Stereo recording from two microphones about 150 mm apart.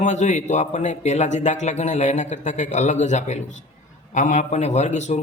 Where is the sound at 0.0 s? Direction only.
50° left (ahead or behind).